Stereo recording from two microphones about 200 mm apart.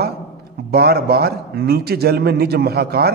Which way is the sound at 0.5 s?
50° right (ahead or behind).